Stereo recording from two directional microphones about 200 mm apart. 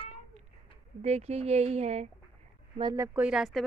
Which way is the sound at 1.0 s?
30° right (ahead or behind).